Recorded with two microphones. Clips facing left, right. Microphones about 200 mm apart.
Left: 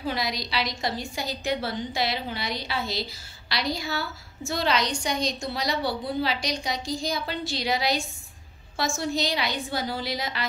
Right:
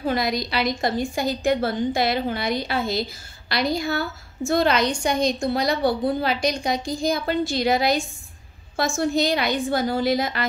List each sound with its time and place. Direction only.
0.0 s a woman's voice: 50° right (ahead or behind)